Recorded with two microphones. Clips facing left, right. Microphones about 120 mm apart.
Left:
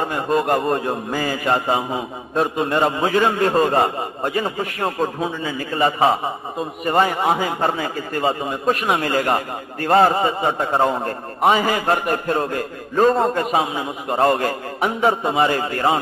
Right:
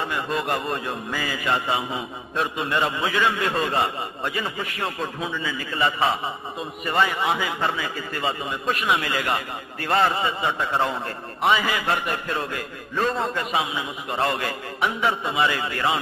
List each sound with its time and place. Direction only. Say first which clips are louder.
0.0 s a man's voice: left 6 dB; 40° left (ahead or behind)